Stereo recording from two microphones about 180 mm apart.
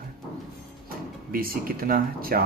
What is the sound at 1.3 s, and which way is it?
Speech, 55° right (ahead or behind).